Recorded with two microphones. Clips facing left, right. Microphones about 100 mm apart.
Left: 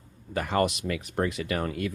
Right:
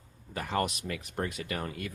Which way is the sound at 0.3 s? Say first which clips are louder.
Left 6 dB; 90° left.